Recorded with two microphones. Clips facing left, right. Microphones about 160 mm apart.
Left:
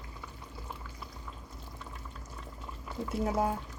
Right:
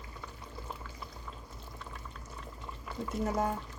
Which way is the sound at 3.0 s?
5° left (ahead or behind).